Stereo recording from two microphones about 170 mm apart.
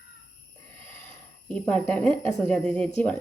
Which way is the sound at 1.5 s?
5° left (ahead or behind).